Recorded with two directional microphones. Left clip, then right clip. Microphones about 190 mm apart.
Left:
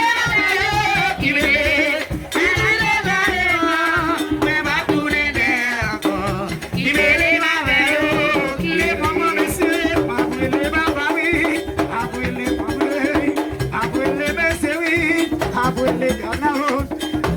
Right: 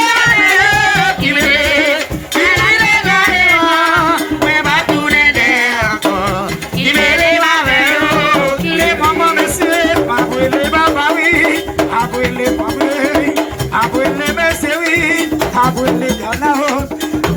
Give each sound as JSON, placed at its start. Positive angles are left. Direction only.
{"t": 0.3, "sound": "music", "side_deg": -10}
{"t": 15.0, "sound": "music", "side_deg": -10}